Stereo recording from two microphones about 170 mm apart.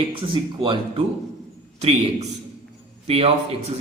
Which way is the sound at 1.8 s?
40° right (ahead or behind).